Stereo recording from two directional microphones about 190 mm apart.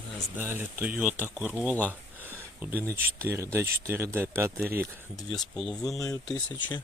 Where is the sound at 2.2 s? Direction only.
10° right (ahead or behind).